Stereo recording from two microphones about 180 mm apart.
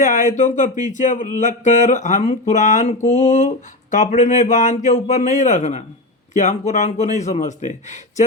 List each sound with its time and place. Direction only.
0.0 s a man's voice: 45° left (ahead or behind)